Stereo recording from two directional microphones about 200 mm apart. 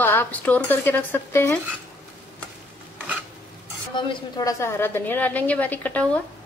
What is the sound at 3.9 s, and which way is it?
A woman's voice, 20° left (ahead or behind).